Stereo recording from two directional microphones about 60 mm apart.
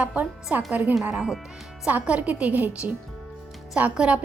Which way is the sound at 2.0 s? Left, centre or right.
Right.